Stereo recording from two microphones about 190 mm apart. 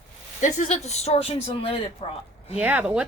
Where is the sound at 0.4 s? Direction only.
35° left (ahead or behind).